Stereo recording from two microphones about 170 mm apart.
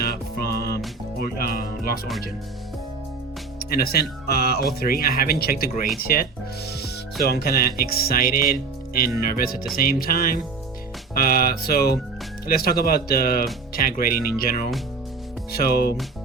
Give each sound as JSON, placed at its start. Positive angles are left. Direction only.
{"t": 0.0, "sound": "music", "side_deg": 60}
{"t": 1.2, "sound": "speech", "side_deg": 60}
{"t": 3.6, "sound": "speech", "side_deg": 60}
{"t": 6.8, "sound": "music", "side_deg": 65}
{"t": 9.0, "sound": "speech", "side_deg": 60}